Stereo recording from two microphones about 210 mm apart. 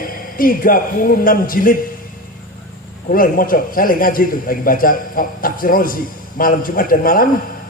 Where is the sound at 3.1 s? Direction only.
40° left (ahead or behind).